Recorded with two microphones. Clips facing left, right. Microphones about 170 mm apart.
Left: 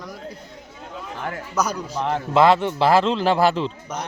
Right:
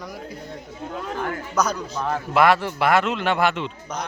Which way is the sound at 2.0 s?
25° left (ahead or behind).